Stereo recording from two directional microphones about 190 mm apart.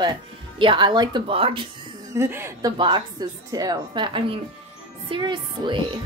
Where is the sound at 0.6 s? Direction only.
25° right (ahead or behind).